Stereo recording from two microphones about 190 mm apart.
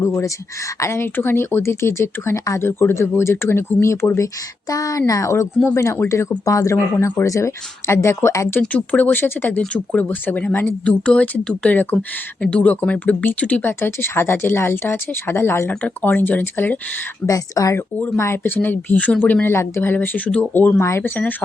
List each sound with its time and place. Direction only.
0.0 s speech: 15° left (ahead or behind)